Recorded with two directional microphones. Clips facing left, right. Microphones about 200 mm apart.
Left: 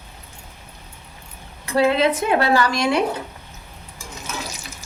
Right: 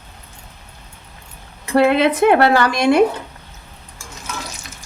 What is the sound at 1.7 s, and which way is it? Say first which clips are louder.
Speech: right 3 dB; 60° right (ahead or behind).